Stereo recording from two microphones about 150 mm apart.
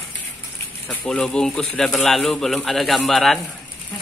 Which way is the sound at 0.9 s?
5° left (ahead or behind).